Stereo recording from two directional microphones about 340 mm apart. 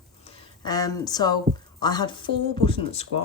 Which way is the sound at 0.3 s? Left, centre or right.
Centre.